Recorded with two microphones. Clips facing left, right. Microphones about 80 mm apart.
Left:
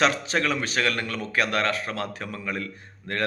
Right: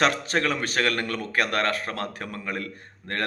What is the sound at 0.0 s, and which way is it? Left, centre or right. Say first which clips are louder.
A man's voice: even; right.